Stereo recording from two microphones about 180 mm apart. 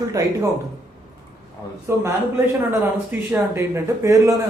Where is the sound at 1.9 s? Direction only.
15° right (ahead or behind).